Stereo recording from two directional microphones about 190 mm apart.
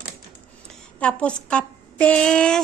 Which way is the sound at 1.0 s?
5° left (ahead or behind).